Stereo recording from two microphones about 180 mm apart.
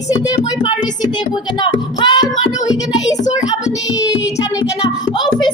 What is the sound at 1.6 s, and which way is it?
Speech, 25° left (ahead or behind).